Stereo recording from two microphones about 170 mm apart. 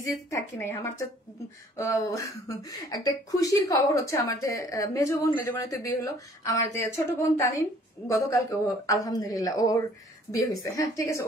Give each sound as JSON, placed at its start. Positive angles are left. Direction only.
{"t": 0.0, "sound": "a woman's voice", "side_deg": 20}